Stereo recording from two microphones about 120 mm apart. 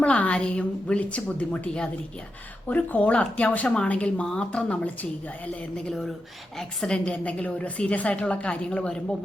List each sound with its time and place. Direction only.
0.0 s a woman's voice: 10° left (ahead or behind)